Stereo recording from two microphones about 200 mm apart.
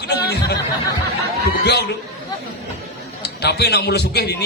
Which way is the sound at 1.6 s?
55° left (ahead or behind).